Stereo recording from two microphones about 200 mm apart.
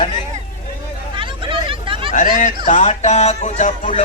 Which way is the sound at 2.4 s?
40° left (ahead or behind).